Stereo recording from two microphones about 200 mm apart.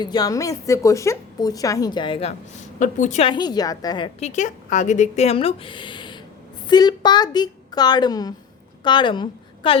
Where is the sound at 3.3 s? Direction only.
20° left (ahead or behind).